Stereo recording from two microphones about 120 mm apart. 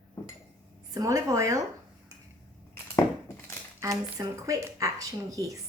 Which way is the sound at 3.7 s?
30° right (ahead or behind).